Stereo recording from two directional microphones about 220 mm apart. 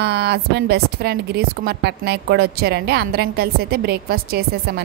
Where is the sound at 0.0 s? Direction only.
45° right (ahead or behind).